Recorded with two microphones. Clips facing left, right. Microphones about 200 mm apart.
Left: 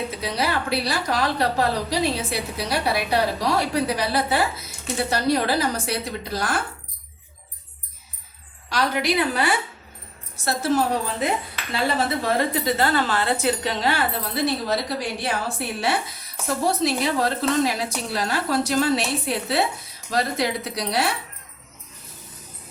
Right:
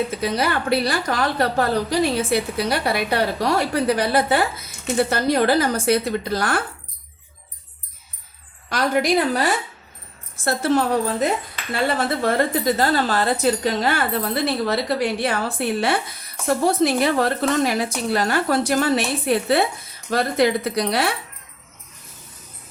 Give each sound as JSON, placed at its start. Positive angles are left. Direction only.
{"t": 0.2, "sound": "a woman's voice", "side_deg": -55}
{"t": 8.7, "sound": "speech", "side_deg": -45}
{"t": 10.3, "sound": "a woman's voice", "side_deg": -55}
{"t": 12.7, "sound": "a woman's voice", "side_deg": -40}